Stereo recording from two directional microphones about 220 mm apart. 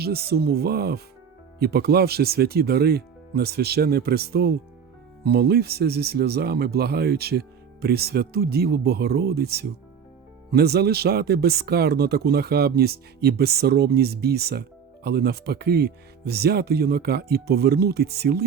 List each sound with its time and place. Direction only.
0.0 s speech: 45° right (ahead or behind)